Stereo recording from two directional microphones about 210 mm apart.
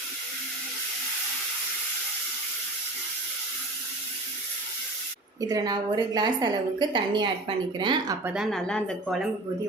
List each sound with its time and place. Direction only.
5.4 s a woman's voice: 15° right (ahead or behind)
8.2 s a woman's voice: 5° right (ahead or behind)